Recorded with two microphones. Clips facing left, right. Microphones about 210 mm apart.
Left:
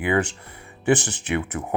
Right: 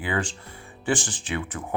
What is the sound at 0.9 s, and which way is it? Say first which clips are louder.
Speech: left 6 dB; 65° left (ahead or behind).